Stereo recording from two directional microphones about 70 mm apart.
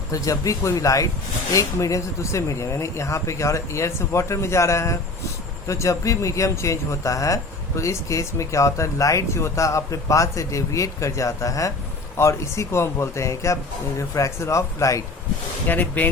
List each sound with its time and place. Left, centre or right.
0.1 s speech: left
15.6 s speech: left